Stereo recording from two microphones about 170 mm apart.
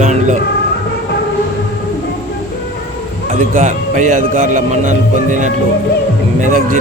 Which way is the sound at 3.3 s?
50° right (ahead or behind).